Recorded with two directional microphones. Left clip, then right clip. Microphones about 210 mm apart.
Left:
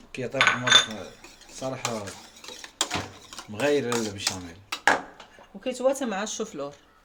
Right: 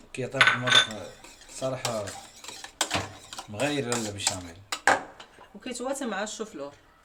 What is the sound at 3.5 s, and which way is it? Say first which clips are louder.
Speech: left 4 dB; centre (ahead or behind).